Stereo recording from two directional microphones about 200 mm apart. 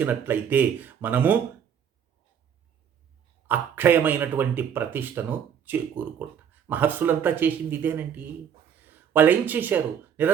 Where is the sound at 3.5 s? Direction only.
10° right (ahead or behind).